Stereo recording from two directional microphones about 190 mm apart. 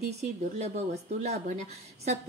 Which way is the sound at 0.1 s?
35° right (ahead or behind).